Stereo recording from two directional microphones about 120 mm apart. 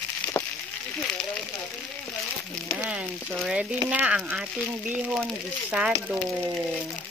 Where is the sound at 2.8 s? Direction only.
10° right (ahead or behind).